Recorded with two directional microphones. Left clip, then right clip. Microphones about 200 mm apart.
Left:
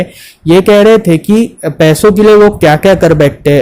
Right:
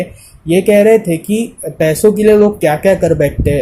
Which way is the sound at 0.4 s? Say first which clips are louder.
Left 4 dB; 40° left (ahead or behind).